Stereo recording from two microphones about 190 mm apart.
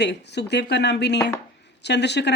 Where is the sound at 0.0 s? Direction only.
65° left (ahead or behind).